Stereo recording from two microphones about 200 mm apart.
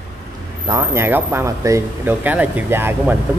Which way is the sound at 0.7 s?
15° right (ahead or behind).